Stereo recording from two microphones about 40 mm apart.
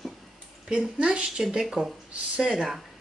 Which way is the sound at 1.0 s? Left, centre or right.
Right.